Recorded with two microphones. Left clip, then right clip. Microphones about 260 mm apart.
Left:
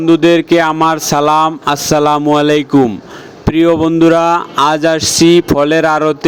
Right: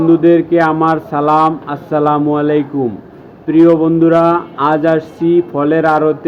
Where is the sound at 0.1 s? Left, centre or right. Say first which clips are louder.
Left 2 dB; left.